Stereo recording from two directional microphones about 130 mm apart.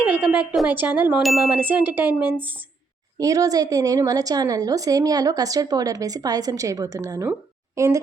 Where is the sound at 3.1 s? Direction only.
25° right (ahead or behind).